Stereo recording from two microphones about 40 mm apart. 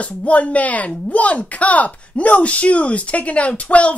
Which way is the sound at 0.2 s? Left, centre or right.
Left.